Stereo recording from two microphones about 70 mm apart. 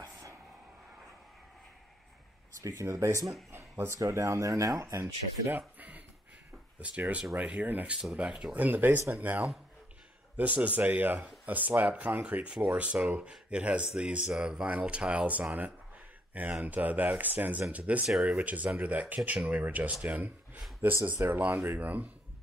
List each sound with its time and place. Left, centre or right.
2.6 s speech: right
3.5 s a sound: right
4.0 s speech: right
5.8 s a sound: right
6.8 s speech: centre
8.5 s speech: right